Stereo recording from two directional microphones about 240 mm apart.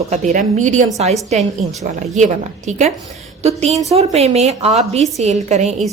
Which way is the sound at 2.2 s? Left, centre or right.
Right.